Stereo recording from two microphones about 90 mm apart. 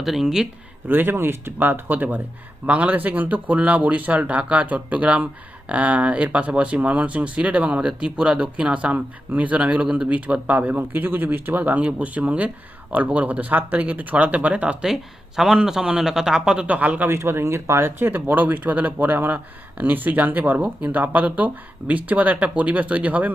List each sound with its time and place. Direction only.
0.0 s speech: 5° right (ahead or behind)
0.9 s speech: 25° right (ahead or behind)
17.2 s speech: 30° right (ahead or behind)